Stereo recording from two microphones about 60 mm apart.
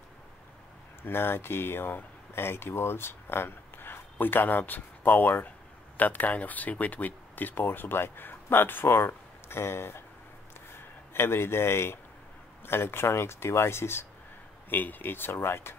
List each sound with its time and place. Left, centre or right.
1.0 s speech: left
11.1 s speech: left
14.7 s speech: left